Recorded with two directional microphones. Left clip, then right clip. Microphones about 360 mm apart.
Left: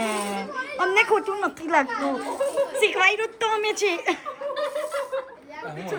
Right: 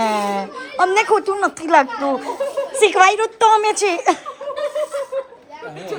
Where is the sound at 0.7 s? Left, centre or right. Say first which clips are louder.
Right 5 dB; centre.